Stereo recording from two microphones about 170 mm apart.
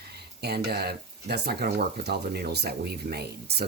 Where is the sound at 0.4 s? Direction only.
70° right (ahead or behind).